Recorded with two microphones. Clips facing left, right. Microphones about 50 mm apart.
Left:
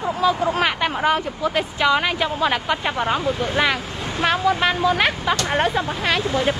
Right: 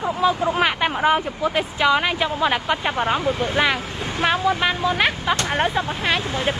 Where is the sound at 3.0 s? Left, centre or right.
Right.